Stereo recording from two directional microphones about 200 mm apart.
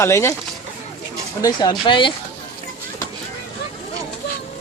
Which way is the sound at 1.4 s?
20° left (ahead or behind).